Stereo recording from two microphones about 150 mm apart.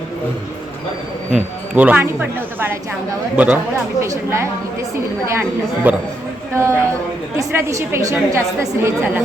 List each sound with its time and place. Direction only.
1.3 s speech: 10° right (ahead or behind)
3.3 s a woman's voice: 10° right (ahead or behind)